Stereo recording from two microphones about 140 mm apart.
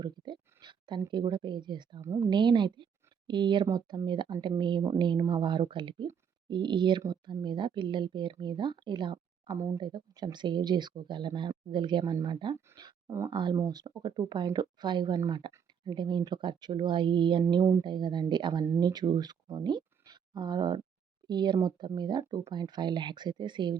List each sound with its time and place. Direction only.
0.0 s a sound: 30° right (ahead or behind)
2.0 s a woman's voice: 20° right (ahead or behind)
2.3 s speech: 35° right (ahead or behind)
13.3 s speech: 35° right (ahead or behind)